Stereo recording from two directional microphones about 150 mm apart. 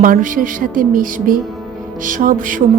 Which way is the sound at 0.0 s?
60° right (ahead or behind).